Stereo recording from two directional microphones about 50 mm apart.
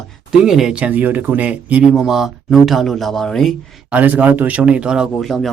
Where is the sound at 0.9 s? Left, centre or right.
Right.